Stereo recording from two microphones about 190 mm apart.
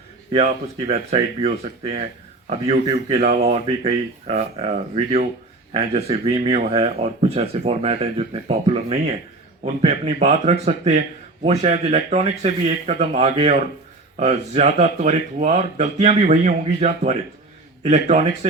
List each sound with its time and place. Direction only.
0.9 s speech: 30° right (ahead or behind)
3.2 s speech: 50° right (ahead or behind)